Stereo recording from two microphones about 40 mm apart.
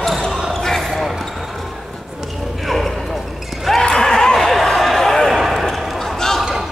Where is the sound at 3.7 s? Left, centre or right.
Centre.